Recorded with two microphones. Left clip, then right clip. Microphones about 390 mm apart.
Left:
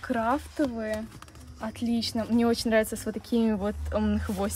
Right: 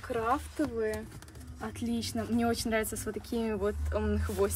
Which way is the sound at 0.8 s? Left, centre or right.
Left.